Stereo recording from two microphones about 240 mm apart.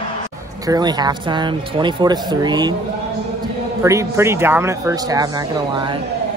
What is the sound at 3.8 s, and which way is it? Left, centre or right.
Speech, centre.